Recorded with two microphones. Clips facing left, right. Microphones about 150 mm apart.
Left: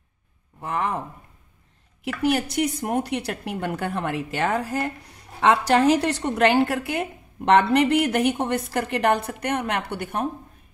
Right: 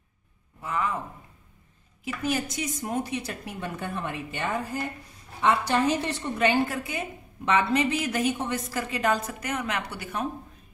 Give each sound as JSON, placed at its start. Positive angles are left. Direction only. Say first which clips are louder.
{"t": 0.6, "sound": "speech", "louder": "left 3 dB", "side_deg": 60}
{"t": 2.0, "sound": "a woman's voice", "louder": "left 6 dB", "side_deg": 70}